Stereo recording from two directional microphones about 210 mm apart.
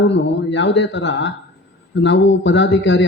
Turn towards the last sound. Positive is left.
turn(degrees=60)  # may be behind; listen again after turning